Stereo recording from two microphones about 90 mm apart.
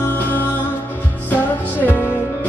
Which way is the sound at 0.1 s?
20° left (ahead or behind).